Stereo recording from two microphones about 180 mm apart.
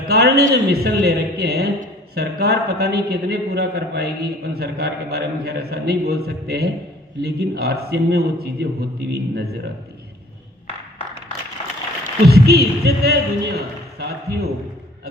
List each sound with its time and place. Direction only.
0.1 s a man's voice: 65° right (ahead or behind)
12.0 s a man's voice: 65° right (ahead or behind)